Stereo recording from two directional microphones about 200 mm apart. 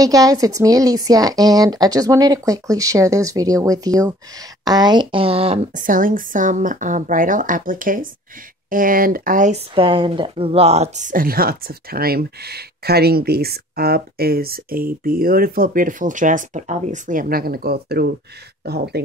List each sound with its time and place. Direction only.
0.0 s a woman's voice: 15° right (ahead or behind); by 9.6 s 40° right (ahead or behind)
9.8 s speech: 25° right (ahead or behind); by 19.0 s 55° right (ahead or behind)